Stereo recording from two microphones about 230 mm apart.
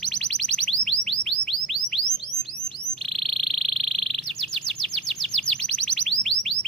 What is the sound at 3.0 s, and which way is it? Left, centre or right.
Insect, centre.